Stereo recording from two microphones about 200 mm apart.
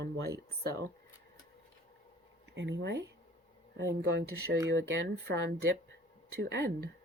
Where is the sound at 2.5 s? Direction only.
60° right (ahead or behind).